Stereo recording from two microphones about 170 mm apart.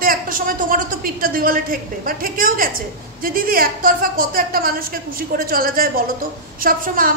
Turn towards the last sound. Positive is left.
turn(degrees=-55)  # may be behind; listen again after turning